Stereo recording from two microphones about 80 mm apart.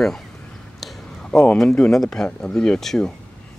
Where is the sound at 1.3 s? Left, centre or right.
Centre.